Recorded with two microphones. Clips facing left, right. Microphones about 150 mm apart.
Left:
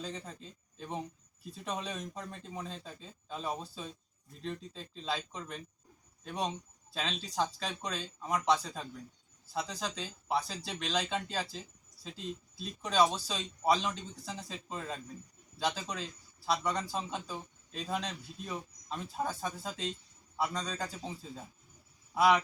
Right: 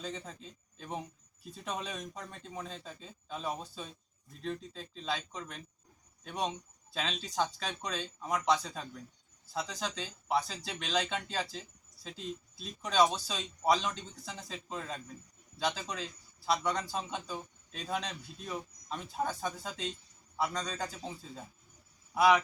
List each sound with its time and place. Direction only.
0.0 s a man's voice: centre (ahead or behind)
22.1 s speech: centre (ahead or behind)